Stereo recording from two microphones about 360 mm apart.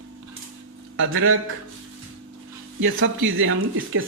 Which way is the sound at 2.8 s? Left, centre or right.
Right.